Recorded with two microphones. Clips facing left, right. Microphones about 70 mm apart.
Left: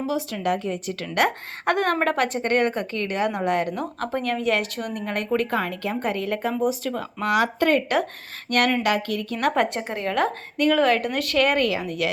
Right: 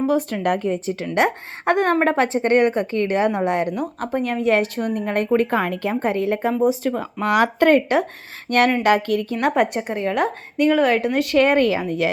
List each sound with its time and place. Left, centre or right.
0.0 s speech: right
0.7 s a woman's voice: right
4.4 s a woman's voice: right
7.3 s speech: right
8.4 s a woman's voice: right
9.3 s speech: centre
9.8 s speech: centre; by 12.1 s right